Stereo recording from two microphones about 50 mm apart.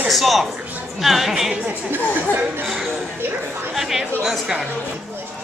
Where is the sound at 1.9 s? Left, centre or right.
Right.